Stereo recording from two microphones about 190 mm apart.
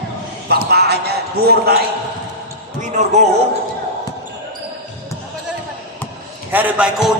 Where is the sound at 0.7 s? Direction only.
55° right (ahead or behind).